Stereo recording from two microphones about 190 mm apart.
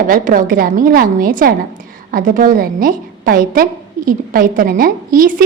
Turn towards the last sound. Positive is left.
turn(degrees=-50)  # may be behind; listen again after turning